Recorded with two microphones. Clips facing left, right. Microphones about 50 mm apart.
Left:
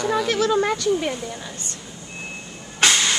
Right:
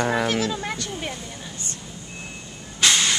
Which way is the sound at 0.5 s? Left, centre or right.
Left.